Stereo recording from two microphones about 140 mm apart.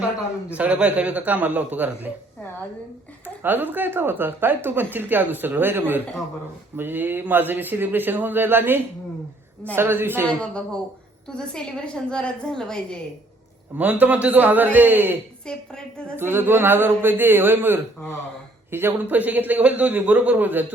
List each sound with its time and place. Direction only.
0.5 s speech: 10° right (ahead or behind)
3.2 s speech: 15° right (ahead or behind)
10.2 s a woman's voice: 5° left (ahead or behind)
13.7 s speech: 10° right (ahead or behind)
15.4 s a woman's voice: 5° left (ahead or behind)
16.1 s speech: 15° right (ahead or behind)